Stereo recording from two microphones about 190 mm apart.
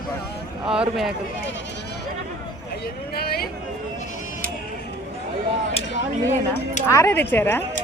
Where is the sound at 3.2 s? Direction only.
55° left (ahead or behind).